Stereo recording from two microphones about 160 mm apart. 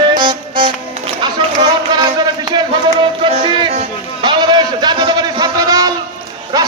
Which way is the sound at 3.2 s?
35° right (ahead or behind).